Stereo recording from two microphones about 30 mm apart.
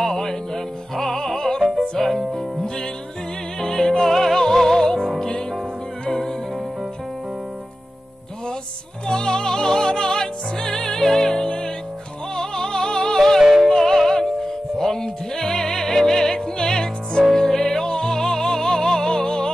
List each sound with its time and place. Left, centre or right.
0.0 s music: centre
3.5 s music: left
9.0 s music: left
13.4 s music: centre
13.7 s music: centre